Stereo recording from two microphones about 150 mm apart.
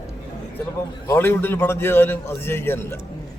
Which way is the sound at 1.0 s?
15° left (ahead or behind).